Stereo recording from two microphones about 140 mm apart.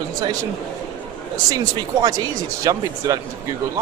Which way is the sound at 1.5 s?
25° right (ahead or behind).